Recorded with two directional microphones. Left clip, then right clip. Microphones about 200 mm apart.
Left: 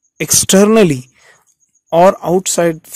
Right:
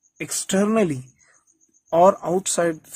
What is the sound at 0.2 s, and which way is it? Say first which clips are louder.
Speech: left 13 dB; 45° left (ahead or behind).